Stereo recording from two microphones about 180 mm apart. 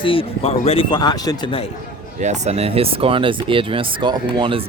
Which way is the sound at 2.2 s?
40° right (ahead or behind).